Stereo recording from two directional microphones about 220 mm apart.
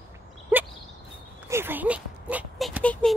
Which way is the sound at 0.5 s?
10° right (ahead or behind).